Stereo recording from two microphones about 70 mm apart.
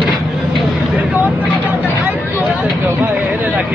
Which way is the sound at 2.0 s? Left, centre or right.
Right.